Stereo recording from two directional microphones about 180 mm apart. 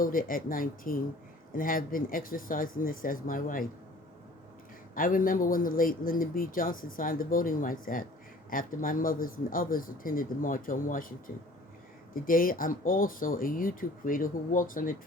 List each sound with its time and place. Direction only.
0.0 s speech: 50° left (ahead or behind)
4.9 s speech: 50° left (ahead or behind)
12.1 s speech: 50° left (ahead or behind)